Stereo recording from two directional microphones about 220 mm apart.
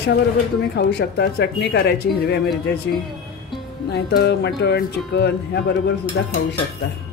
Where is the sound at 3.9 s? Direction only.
50° left (ahead or behind).